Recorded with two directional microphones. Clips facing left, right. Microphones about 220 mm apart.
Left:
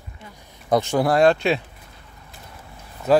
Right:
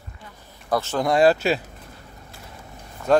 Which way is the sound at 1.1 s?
5° right (ahead or behind).